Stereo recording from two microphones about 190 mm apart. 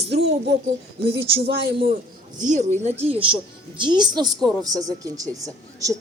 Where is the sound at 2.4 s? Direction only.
40° right (ahead or behind); by 5.9 s 15° right (ahead or behind).